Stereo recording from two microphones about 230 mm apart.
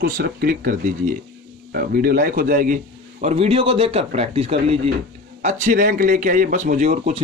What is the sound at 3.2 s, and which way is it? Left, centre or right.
Speech, right.